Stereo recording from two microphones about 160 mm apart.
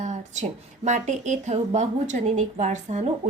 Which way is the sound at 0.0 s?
45° right (ahead or behind).